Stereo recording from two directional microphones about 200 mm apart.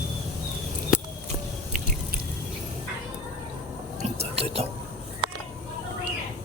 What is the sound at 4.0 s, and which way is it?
Whispering, 30° right (ahead or behind).